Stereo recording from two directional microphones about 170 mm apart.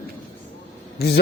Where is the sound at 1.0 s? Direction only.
70° left (ahead or behind).